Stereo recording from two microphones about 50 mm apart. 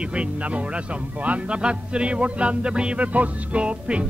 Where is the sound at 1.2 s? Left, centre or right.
Right.